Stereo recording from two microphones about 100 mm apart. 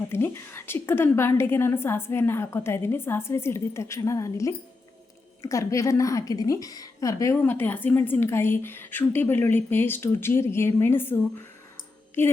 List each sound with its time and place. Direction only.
0.1 s a woman's voice: 25° left (ahead or behind)
7.4 s a woman's voice: 20° left (ahead or behind)